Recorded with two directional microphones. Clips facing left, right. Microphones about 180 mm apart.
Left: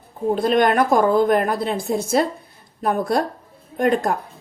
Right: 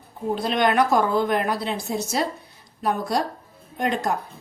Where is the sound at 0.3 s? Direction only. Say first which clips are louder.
Left 3 dB; 50° left (ahead or behind).